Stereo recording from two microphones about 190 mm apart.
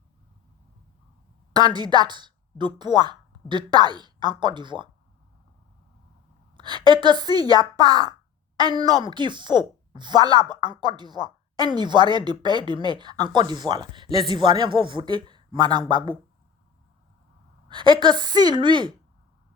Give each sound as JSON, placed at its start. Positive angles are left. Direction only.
{"t": 1.7, "sound": "a woman's voice", "side_deg": -20}
{"t": 6.6, "sound": "a woman's voice", "side_deg": -25}
{"t": 17.7, "sound": "a woman's voice", "side_deg": -25}